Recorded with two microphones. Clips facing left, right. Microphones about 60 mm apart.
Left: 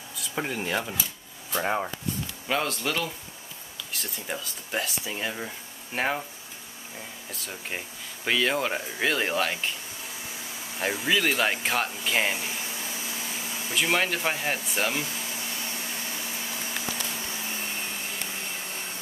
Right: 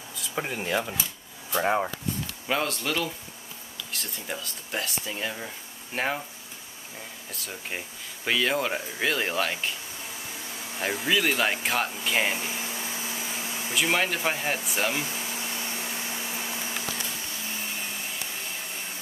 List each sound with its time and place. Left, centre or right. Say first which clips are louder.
0.2 s speech: left 1 dB; centre
7.2 s speech: even; centre
10.8 s speech: even; centre
12.4 s a sound: right 1 dB; centre
13.7 s speech: even; centre
15.0 s a sound: right 1 dB; right
15.8 s vacuum cleaner: right 1 dB; centre